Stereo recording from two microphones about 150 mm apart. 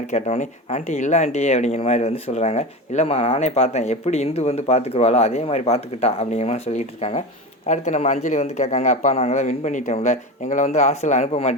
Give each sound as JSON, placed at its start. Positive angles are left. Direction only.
{"t": 0.1, "sound": "speech", "side_deg": 50}